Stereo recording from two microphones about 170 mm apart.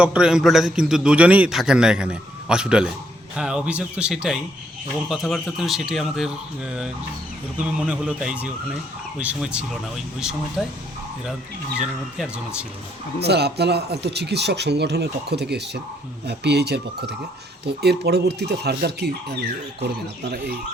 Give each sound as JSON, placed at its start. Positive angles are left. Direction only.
{"t": 0.0, "sound": "a man's voice", "side_deg": -5}
{"t": 11.8, "sound": "a man's voice", "side_deg": -5}
{"t": 13.2, "sound": "speech", "side_deg": -75}